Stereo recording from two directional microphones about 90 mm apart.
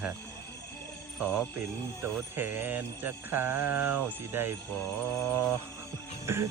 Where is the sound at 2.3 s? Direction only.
25° right (ahead or behind).